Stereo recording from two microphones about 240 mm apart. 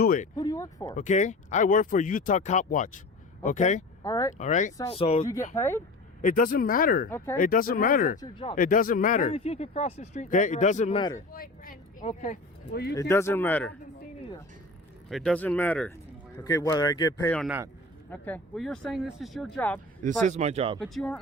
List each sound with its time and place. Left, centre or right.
0.0 s speech: left
0.3 s speech: centre
0.9 s speech: left
4.0 s speech: centre
4.4 s speech: left
5.5 s speech: centre
6.2 s speech: left
8.2 s speech: centre
8.5 s speech: left
12.9 s speech: centre
15.1 s speech: centre
20.2 s speech: right
20.8 s speech: centre